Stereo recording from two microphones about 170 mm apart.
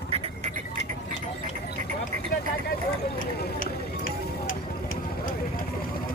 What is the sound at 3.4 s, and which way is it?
Music, 65° left (ahead or behind).